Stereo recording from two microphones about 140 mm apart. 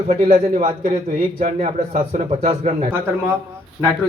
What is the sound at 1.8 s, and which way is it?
Speech, 75° right (ahead or behind).